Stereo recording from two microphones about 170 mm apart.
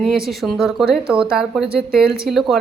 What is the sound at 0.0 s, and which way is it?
Speech, centre (ahead or behind).